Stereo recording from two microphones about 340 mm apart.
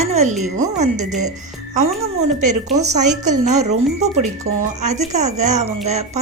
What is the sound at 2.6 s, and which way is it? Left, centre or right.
A woman's voice, centre.